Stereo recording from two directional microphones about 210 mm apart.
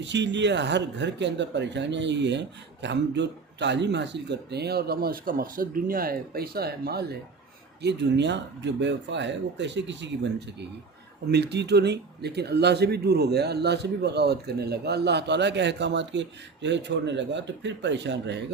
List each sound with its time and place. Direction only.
0.0 s speech: 60° right (ahead or behind)
11.3 s speech: 55° right (ahead or behind)